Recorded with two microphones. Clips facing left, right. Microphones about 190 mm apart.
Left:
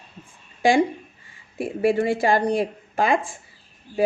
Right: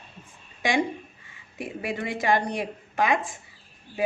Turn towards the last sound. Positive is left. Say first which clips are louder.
# left 3 dB
turn(degrees=30)  # may be behind; listen again after turning